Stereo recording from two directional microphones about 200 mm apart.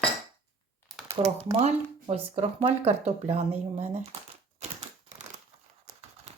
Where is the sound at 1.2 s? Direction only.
30° right (ahead or behind).